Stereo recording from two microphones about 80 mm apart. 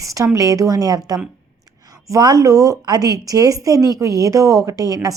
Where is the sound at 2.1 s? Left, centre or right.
Right.